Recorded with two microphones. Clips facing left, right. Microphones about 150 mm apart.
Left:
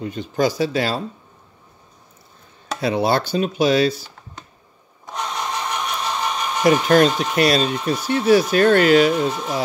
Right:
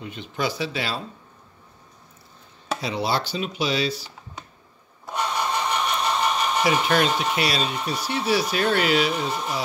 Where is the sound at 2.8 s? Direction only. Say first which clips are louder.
Left 7 dB; 50° left (ahead or behind).